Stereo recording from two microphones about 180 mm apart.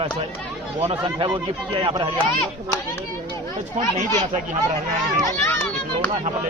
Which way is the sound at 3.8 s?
45° right (ahead or behind).